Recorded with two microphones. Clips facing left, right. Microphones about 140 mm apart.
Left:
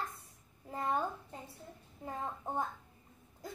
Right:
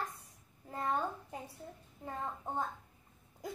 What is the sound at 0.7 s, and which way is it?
Speech, 15° left (ahead or behind).